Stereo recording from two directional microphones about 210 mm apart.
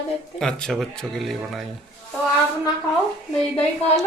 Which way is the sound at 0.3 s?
Centre (ahead or behind).